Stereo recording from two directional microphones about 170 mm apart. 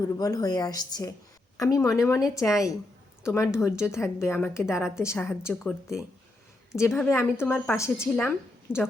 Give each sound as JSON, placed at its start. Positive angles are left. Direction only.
{"t": 0.2, "sound": "a woman's voice", "side_deg": 20}
{"t": 6.7, "sound": "a woman's voice", "side_deg": 15}